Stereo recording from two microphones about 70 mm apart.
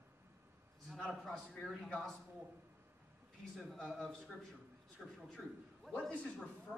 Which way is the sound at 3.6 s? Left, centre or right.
Centre.